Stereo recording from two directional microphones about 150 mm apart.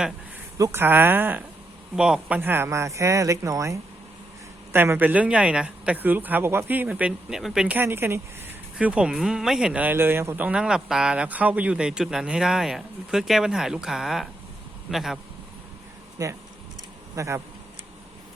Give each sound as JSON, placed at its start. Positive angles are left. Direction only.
{"t": 0.6, "sound": "speech", "side_deg": -15}
{"t": 16.2, "sound": "speech", "side_deg": -20}